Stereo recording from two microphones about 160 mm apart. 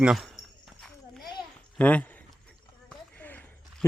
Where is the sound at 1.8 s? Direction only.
10° left (ahead or behind).